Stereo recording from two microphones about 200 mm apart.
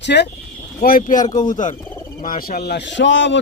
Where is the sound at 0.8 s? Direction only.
45° left (ahead or behind).